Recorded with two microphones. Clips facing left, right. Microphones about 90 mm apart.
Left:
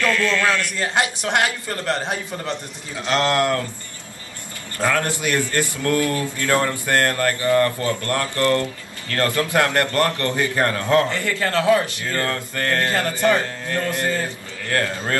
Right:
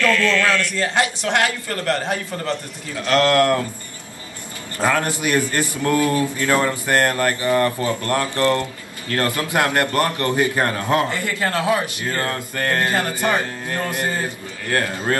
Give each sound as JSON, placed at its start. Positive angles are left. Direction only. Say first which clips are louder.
{"t": 0.0, "sound": "a man's voice", "louder": "right 2 dB", "side_deg": 20}
{"t": 4.7, "sound": "a man's voice", "louder": "right 1 dB", "side_deg": -25}